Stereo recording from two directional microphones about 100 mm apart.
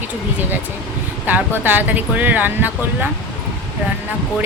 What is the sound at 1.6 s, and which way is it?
Speech, 20° right (ahead or behind).